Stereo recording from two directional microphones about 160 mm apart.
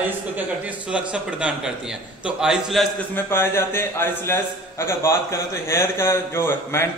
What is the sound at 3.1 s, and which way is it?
A man's voice, 15° left (ahead or behind).